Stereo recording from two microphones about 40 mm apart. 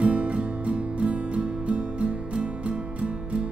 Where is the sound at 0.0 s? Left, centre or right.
Right.